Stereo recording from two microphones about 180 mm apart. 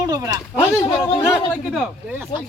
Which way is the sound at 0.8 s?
15° left (ahead or behind).